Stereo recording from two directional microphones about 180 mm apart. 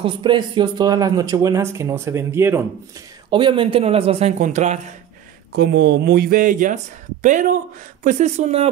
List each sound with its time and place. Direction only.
0.0 s speech: 25° right (ahead or behind)
3.3 s a man's voice: 25° right (ahead or behind)
5.6 s a man's voice: 70° right (ahead or behind); by 8.6 s 40° right (ahead or behind)